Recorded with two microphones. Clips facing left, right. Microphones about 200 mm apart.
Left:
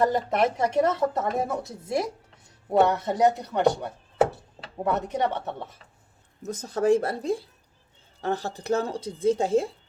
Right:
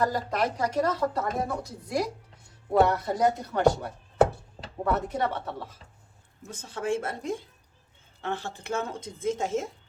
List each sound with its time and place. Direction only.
0.0 s speech: 25° left (ahead or behind)
6.4 s speech: 40° left (ahead or behind)